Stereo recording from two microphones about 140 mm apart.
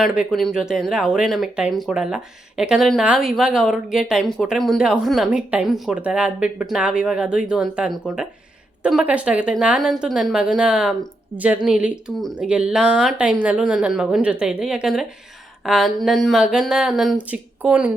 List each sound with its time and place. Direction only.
0.3 s speech: 5° left (ahead or behind)